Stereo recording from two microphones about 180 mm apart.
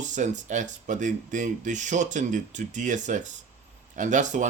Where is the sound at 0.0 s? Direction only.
40° right (ahead or behind).